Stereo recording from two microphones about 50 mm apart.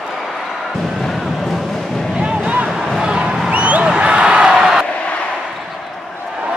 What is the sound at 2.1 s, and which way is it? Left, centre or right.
Boat, centre.